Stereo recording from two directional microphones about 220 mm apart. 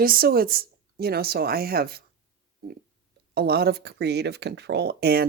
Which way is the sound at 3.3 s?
45° right (ahead or behind).